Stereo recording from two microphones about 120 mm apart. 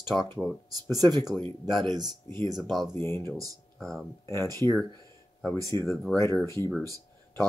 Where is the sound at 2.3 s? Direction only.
40° right (ahead or behind).